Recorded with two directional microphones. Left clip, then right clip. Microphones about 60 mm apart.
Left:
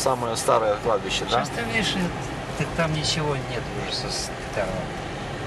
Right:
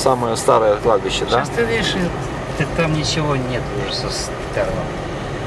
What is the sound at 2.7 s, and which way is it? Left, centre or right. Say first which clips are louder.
Speech: right 5 dB; right.